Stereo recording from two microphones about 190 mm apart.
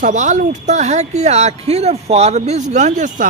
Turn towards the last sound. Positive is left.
turn(degrees=-40)  # may be behind; listen again after turning